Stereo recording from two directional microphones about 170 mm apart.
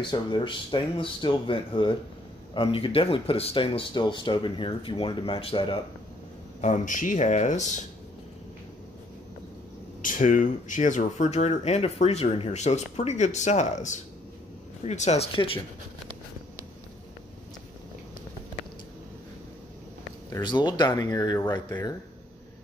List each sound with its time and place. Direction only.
0.0 s speech: 25° left (ahead or behind)
6.6 s speech: 45° left (ahead or behind)
10.0 s speech: 50° left (ahead or behind); by 15.6 s 35° left (ahead or behind)
20.3 s speech: 25° left (ahead or behind)